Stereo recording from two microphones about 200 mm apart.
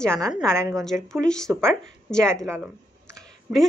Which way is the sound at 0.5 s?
15° right (ahead or behind).